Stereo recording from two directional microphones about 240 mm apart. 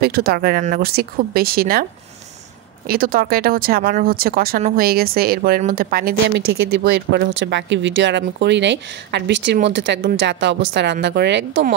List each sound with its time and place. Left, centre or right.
0.0 s speech: right
2.9 s speech: right